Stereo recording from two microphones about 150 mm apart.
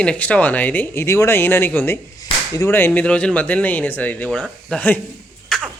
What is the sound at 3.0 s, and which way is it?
Speech, 10° left (ahead or behind).